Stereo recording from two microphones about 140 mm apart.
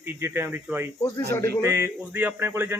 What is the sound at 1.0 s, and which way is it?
Speech, 20° left (ahead or behind).